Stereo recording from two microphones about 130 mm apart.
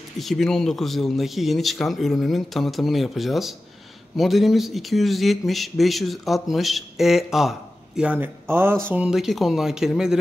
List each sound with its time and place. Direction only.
0.2 s speech: centre (ahead or behind); by 8.7 s 15° right (ahead or behind)
8.9 s speech: 5° right (ahead or behind)